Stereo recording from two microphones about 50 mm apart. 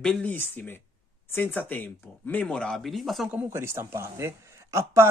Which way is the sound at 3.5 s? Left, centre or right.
Right.